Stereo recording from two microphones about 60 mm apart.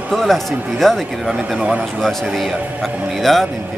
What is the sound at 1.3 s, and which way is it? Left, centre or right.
Speech, centre.